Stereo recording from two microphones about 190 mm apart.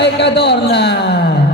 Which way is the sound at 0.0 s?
65° left (ahead or behind).